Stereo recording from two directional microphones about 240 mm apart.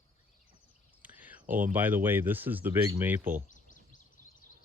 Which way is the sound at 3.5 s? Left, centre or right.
Left.